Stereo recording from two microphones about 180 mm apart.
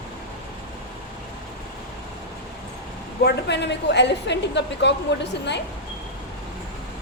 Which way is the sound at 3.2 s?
65° left (ahead or behind).